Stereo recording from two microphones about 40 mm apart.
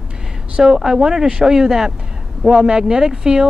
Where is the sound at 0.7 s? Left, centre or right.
Centre.